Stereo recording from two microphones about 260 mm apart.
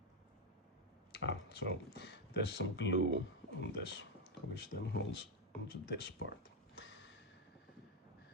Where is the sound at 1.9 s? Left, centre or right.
Left.